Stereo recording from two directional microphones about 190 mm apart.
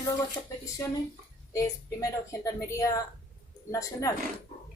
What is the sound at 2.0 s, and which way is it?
A woman's voice, 15° left (ahead or behind).